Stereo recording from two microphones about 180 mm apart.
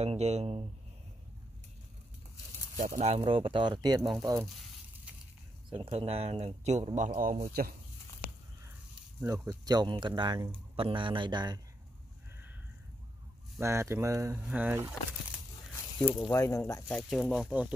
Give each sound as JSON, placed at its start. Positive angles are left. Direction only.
{"t": 0.0, "sound": "speech", "side_deg": -35}
{"t": 3.0, "sound": "speech", "side_deg": -30}
{"t": 4.3, "sound": "frying", "side_deg": 0}
{"t": 5.7, "sound": "speech", "side_deg": -30}
{"t": 7.0, "sound": "a man's voice", "side_deg": -45}
{"t": 9.2, "sound": "speech", "side_deg": -15}
{"t": 13.6, "sound": "speech", "side_deg": -15}
{"t": 15.7, "sound": "a sound", "side_deg": 15}
{"t": 16.2, "sound": "speech", "side_deg": 15}
{"t": 17.1, "sound": "speech", "side_deg": 0}